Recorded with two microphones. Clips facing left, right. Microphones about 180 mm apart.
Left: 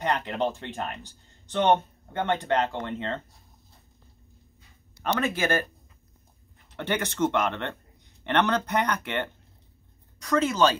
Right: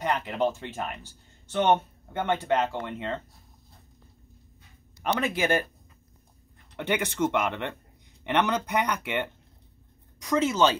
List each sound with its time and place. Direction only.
0.0 s speech: 5° right (ahead or behind)
5.0 s speech: 15° right (ahead or behind)
6.8 s speech: 15° right (ahead or behind)